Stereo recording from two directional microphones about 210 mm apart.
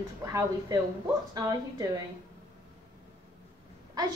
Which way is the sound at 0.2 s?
15° right (ahead or behind).